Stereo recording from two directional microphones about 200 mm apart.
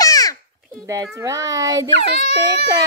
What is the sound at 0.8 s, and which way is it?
A child's voice, 15° right (ahead or behind).